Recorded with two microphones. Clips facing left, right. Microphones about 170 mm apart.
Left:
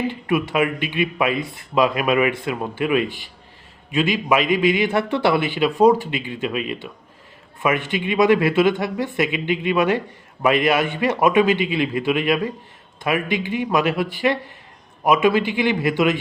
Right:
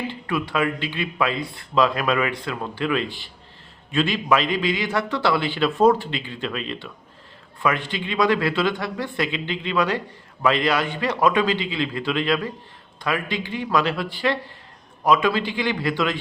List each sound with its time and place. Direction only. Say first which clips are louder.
0.1 s speech: left 4 dB; 20° left (ahead or behind)